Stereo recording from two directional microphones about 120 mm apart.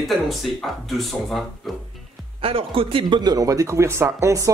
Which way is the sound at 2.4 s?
50° right (ahead or behind).